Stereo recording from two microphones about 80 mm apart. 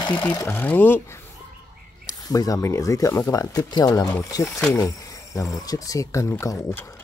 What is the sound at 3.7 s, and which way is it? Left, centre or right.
Speech, left.